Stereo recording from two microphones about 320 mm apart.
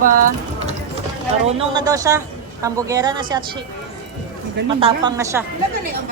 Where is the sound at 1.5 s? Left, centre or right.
Centre.